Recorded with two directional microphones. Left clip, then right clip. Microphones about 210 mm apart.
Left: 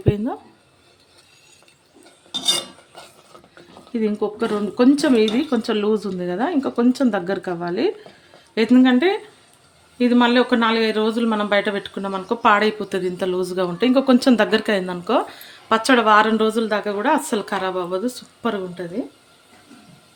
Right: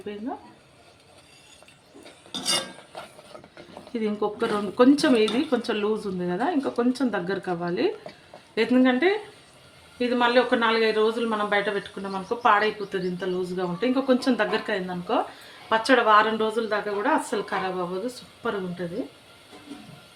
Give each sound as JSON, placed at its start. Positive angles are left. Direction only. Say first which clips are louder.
{"t": 0.0, "sound": "speech", "louder": "left 11 dB", "side_deg": 55}
{"t": 3.9, "sound": "speech", "louder": "left 4 dB", "side_deg": 25}